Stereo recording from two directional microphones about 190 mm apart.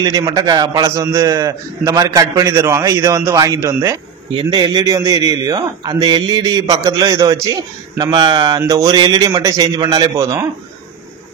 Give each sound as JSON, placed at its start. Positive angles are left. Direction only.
{"t": 0.0, "sound": "a man's voice", "side_deg": -20}